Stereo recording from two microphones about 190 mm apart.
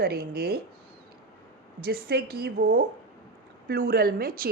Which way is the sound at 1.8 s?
55° right (ahead or behind).